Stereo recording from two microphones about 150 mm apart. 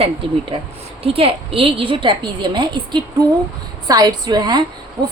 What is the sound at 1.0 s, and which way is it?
A woman's voice, 40° right (ahead or behind).